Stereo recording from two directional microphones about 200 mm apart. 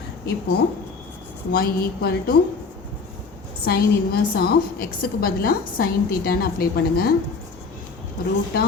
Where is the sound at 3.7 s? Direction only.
50° left (ahead or behind).